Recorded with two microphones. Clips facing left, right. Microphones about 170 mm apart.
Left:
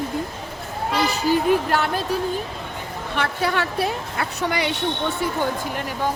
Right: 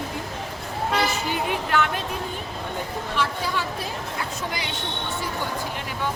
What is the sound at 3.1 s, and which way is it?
A woman's voice, 65° left (ahead or behind).